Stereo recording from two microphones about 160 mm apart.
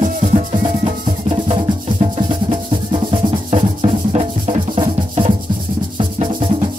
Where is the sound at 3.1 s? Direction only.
40° right (ahead or behind).